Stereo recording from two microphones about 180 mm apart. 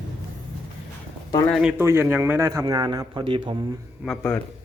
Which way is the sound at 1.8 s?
15° right (ahead or behind).